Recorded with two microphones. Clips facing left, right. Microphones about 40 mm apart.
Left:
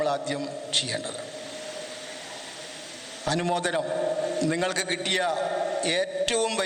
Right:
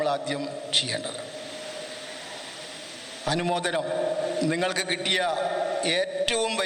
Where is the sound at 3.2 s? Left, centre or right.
Centre.